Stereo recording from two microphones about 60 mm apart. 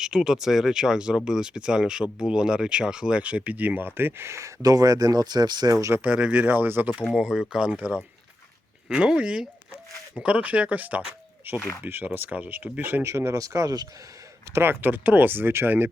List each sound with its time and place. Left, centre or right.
0.0 s speech: centre; by 4.5 s right
4.6 s speech: right
6.1 s speech: centre
7.1 s speech: centre
7.8 s speech: right
8.9 s speech: centre
11.8 s speech: right
13.1 s a man's voice: right
13.4 s speech: right
14.5 s speech: right